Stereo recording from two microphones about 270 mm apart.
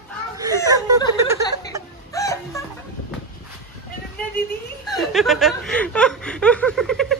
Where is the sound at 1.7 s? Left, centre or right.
Centre.